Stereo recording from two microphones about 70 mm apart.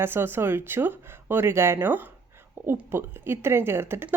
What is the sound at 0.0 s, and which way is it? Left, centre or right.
Speech, right.